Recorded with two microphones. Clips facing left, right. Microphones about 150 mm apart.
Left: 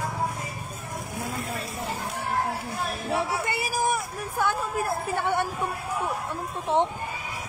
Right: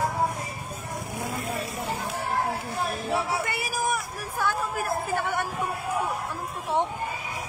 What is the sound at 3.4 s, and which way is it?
Speech, 25° left (ahead or behind).